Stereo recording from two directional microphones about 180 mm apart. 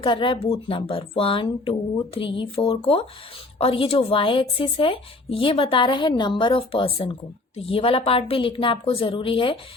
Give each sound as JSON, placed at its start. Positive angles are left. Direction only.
{"t": 0.0, "sound": "speech", "side_deg": 25}